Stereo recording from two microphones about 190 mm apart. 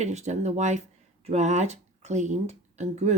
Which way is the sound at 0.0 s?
35° right (ahead or behind).